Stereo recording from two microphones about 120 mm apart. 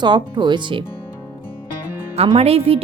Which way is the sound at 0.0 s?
40° right (ahead or behind).